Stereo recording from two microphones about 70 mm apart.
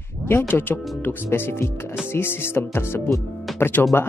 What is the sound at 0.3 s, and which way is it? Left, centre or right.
Speech, left.